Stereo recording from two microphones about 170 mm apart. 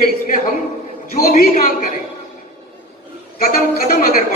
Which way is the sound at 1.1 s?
55° left (ahead or behind).